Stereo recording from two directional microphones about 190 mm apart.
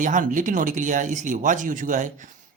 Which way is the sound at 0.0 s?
45° right (ahead or behind).